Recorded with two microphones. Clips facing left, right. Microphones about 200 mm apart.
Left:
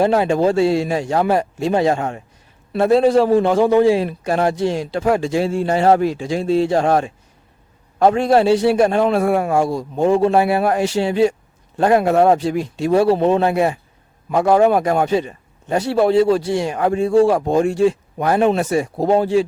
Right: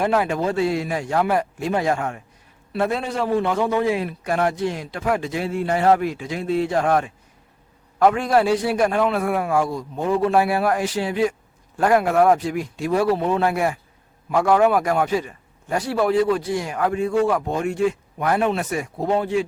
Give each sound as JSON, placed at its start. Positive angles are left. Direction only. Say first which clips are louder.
{"t": 0.0, "sound": "a man's voice", "louder": "left 6 dB", "side_deg": 30}